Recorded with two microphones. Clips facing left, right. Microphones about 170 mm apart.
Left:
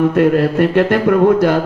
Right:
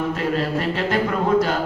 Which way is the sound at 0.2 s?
60° left (ahead or behind).